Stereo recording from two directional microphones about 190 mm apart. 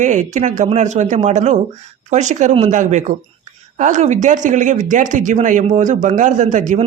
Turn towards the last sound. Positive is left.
turn(degrees=-40)  # may be behind; listen again after turning